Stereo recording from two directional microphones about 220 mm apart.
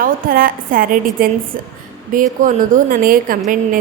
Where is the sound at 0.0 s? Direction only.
40° right (ahead or behind).